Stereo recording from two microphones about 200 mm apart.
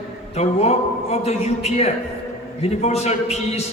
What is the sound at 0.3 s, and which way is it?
A man's voice, 35° left (ahead or behind).